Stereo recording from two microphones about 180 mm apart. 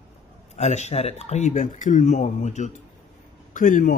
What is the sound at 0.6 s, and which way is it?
A man's voice, 40° left (ahead or behind).